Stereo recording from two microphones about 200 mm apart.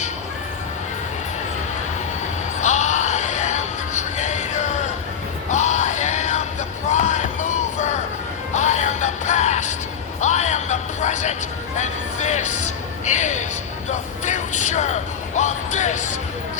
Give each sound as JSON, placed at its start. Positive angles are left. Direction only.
{"t": 2.6, "sound": "music", "side_deg": 35}
{"t": 6.9, "sound": "a sound", "side_deg": 35}
{"t": 8.5, "sound": "music", "side_deg": 35}